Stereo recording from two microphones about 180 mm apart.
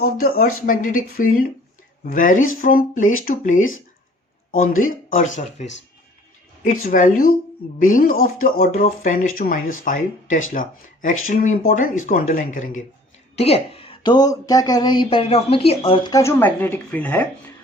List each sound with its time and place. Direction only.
0.0 s speech: 55° left (ahead or behind)
13.3 s speech: 35° left (ahead or behind)
16.1 s speech: 15° left (ahead or behind)